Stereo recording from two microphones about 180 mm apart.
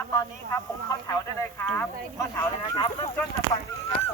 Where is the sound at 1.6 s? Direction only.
10° left (ahead or behind).